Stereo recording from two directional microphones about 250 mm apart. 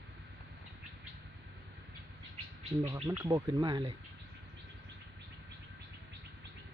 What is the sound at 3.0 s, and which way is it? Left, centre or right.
Speech, centre.